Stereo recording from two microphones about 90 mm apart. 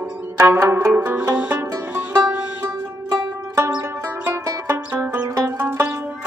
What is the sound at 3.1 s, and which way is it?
Music, 35° right (ahead or behind).